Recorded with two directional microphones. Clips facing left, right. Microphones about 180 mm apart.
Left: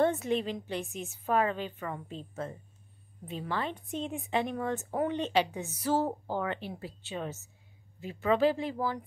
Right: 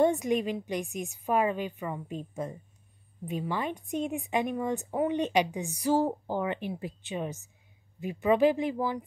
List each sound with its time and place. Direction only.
0.0 s a woman's voice: 15° right (ahead or behind)